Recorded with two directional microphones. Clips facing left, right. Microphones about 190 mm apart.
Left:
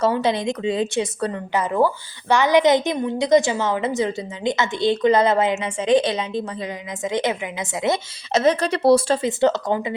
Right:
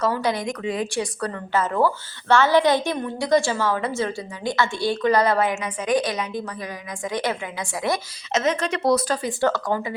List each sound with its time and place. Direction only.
0.0 s a woman's voice: 25° left (ahead or behind)